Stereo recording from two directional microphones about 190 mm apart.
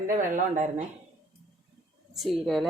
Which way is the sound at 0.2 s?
40° right (ahead or behind).